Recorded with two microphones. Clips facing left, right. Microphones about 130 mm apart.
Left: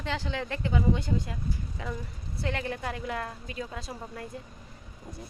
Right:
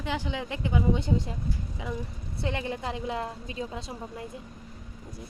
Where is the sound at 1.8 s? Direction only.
15° right (ahead or behind).